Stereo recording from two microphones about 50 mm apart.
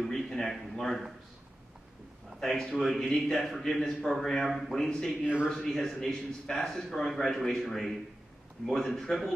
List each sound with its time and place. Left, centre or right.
0.0 s speech: centre
2.4 s a man's voice: centre
5.2 s speech: right
5.5 s a man's voice: centre